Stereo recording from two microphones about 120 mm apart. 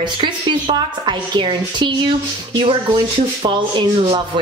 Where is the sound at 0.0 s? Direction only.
40° right (ahead or behind).